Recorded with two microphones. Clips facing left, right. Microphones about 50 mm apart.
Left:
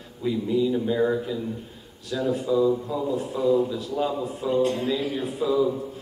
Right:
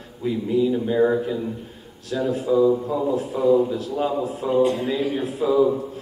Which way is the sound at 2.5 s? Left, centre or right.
Right.